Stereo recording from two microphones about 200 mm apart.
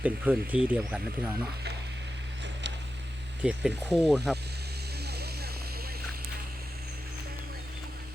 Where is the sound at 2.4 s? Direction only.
60° right (ahead or behind).